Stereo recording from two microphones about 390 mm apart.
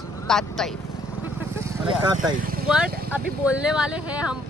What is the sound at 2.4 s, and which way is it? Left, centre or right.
Vehicle, right.